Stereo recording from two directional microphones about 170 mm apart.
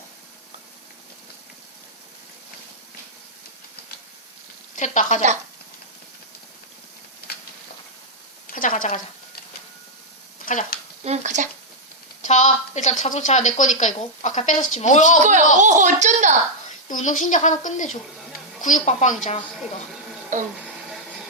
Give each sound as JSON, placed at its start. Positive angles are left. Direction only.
{"t": 4.8, "sound": "a woman's voice", "side_deg": 45}
{"t": 7.3, "sound": "a sound", "side_deg": 65}
{"t": 8.5, "sound": "a woman's voice", "side_deg": 50}
{"t": 10.4, "sound": "speech", "side_deg": 45}
{"t": 11.0, "sound": "speech", "side_deg": -40}
{"t": 12.2, "sound": "a woman's voice", "side_deg": 45}
{"t": 15.2, "sound": "a child's voice", "side_deg": -45}
{"t": 16.9, "sound": "a woman's voice", "side_deg": 45}
{"t": 20.3, "sound": "speech", "side_deg": -50}